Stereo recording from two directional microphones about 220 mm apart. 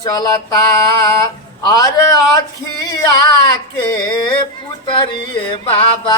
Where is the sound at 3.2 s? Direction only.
20° left (ahead or behind).